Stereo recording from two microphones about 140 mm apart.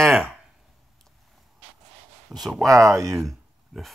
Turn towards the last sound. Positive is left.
turn(degrees=0)  # may be behind; listen again after turning